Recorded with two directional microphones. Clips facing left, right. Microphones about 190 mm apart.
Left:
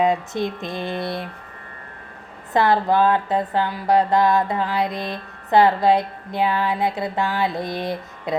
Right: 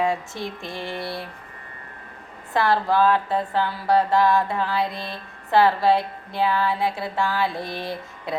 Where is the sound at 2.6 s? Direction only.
20° left (ahead or behind).